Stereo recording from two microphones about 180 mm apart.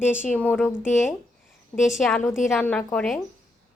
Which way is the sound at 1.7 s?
Centre (ahead or behind).